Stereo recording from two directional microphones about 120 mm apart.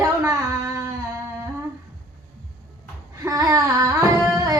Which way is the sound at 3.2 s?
30° right (ahead or behind).